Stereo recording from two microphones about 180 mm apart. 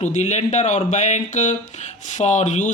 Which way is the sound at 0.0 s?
40° left (ahead or behind).